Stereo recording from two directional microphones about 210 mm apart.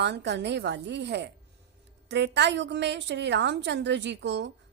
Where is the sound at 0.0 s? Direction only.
55° right (ahead or behind).